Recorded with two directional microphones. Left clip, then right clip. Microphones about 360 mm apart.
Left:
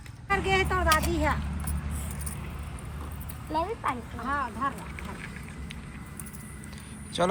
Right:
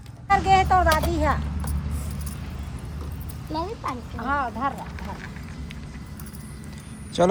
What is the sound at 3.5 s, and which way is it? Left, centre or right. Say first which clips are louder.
Speech: even; left.